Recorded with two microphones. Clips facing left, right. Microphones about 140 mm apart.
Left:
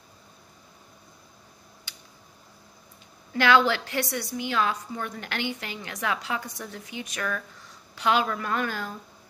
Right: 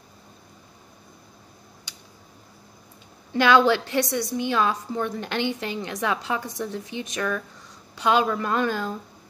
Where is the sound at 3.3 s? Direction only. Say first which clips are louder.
Right 3 dB; 20° right (ahead or behind).